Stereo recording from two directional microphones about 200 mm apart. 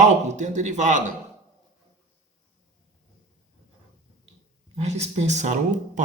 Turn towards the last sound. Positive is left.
turn(degrees=-35)  # may be behind; listen again after turning